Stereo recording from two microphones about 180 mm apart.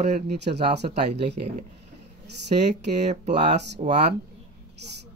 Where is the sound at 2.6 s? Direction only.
40° right (ahead or behind).